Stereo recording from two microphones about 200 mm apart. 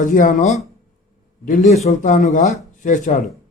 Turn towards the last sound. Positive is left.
turn(degrees=40)  # may be behind; listen again after turning